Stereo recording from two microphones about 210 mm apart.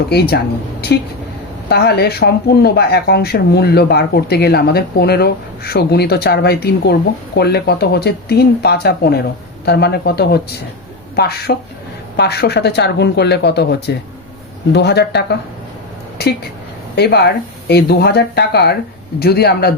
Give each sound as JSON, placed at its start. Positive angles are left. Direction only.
{"t": 0.1, "sound": "speech", "side_deg": 50}
{"t": 1.7, "sound": "speech", "side_deg": 50}